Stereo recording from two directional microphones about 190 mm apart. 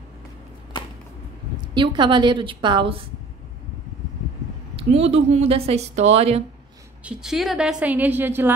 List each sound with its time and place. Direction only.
1.6 s a woman's voice: 25° right (ahead or behind)
4.7 s speech: 35° right (ahead or behind)
7.1 s a woman's voice: 5° right (ahead or behind)